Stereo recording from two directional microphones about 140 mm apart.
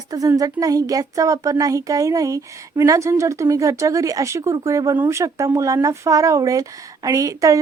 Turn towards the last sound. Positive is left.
turn(degrees=-25)  # may be behind; listen again after turning